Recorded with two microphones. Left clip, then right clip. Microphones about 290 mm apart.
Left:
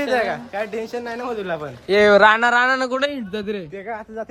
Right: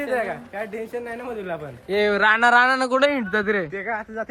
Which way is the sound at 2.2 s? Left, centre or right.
Centre.